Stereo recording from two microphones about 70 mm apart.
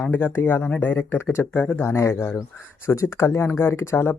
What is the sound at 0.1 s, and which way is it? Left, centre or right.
Speech, left.